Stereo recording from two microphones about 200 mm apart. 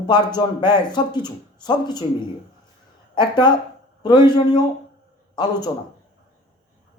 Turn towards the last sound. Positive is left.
turn(degrees=20)  # may be behind; listen again after turning